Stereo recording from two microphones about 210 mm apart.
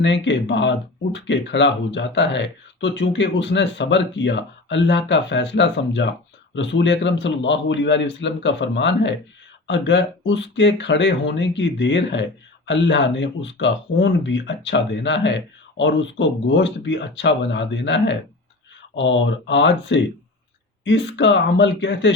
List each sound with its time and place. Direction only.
0.0 s speech: 60° left (ahead or behind)